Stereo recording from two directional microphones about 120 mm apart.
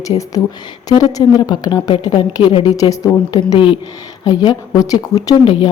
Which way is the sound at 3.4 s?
45° left (ahead or behind).